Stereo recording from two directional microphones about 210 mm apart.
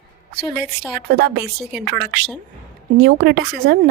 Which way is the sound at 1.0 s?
50° right (ahead or behind).